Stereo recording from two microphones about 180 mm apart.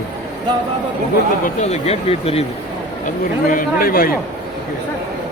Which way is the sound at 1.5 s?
35° left (ahead or behind).